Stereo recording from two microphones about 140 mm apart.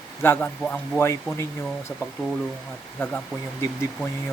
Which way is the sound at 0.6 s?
5° left (ahead or behind).